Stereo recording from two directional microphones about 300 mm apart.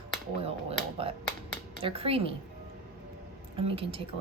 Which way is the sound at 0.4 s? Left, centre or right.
Centre.